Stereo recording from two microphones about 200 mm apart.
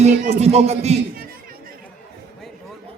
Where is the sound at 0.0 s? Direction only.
35° right (ahead or behind).